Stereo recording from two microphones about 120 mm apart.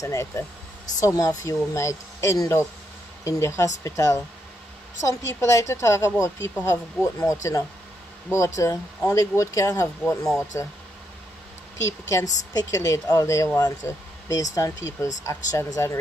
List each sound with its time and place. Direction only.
0.0 s speech: 25° left (ahead or behind)
11.8 s speech: 25° left (ahead or behind)